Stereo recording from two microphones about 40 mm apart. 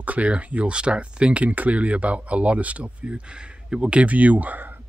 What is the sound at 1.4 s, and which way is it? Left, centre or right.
Speech, right.